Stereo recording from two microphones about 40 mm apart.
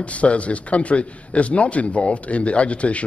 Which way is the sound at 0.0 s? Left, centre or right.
Left.